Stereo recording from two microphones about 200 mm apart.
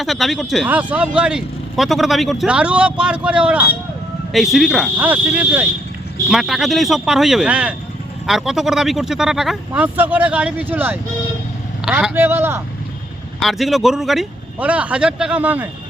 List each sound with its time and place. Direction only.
0.0 s speech: centre (ahead or behind)
13.4 s speech: centre (ahead or behind)